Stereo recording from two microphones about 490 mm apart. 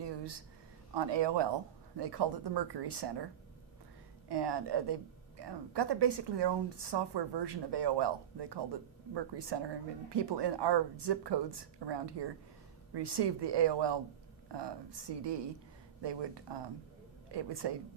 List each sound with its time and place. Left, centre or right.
0.0 s a sound: right
0.9 s speech: right
4.3 s speech: right